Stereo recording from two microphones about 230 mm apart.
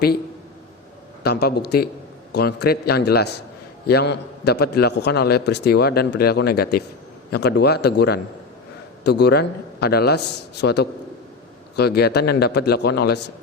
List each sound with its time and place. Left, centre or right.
1.2 s a man's voice: left